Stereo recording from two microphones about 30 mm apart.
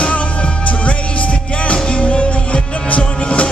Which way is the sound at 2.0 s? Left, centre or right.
Left.